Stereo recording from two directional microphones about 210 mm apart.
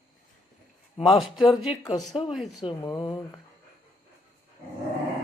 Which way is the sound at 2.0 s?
25° left (ahead or behind).